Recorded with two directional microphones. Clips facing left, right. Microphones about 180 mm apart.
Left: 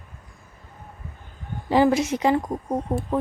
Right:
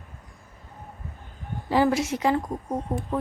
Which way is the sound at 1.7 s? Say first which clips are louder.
Left 3 dB; 20° left (ahead or behind).